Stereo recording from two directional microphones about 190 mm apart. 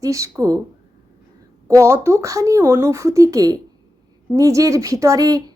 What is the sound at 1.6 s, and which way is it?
A woman's voice, 15° right (ahead or behind).